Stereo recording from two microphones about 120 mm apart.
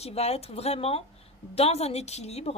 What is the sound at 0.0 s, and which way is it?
A woman's voice, 60° left (ahead or behind).